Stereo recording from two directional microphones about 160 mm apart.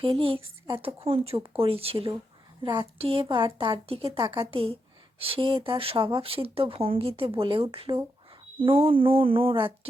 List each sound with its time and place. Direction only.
0.0 s speech: 35° right (ahead or behind)